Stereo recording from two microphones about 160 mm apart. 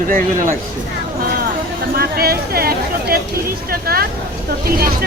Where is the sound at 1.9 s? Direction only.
75° right (ahead or behind).